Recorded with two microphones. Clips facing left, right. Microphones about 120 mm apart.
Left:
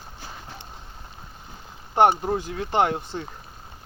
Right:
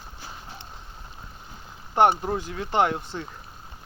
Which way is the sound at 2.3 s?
30° left (ahead or behind).